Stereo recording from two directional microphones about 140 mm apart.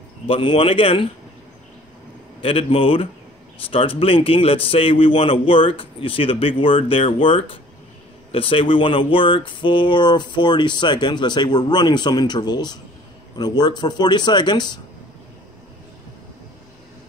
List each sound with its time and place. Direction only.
0.3 s speech: 40° left (ahead or behind)
2.4 s speech: 40° left (ahead or behind)